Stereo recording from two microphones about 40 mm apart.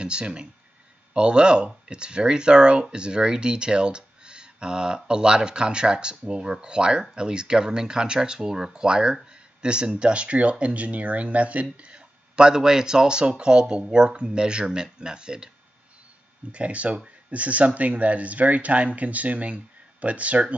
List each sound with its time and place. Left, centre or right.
0.0 s speech: right
12.4 s speech: centre
16.5 s speech: right